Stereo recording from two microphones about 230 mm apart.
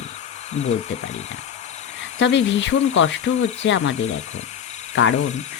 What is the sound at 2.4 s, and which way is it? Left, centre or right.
Speech, left.